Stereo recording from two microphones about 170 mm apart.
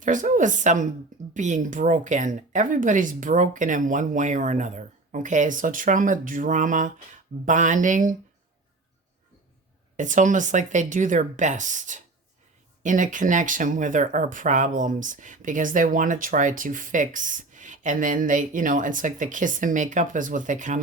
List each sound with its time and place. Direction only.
0.0 s speech: 50° right (ahead or behind)
10.0 s speech: 50° right (ahead or behind)